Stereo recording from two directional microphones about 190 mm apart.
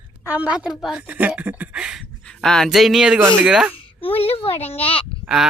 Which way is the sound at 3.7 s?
30° left (ahead or behind).